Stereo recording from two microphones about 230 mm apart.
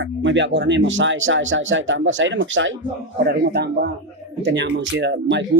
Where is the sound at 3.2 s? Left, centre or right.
Right.